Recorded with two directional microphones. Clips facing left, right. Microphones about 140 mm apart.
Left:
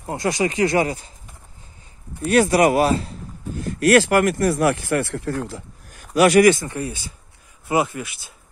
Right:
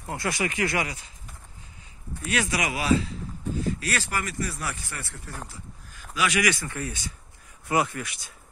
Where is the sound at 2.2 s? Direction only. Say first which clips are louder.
Left 12 dB; 50° left (ahead or behind).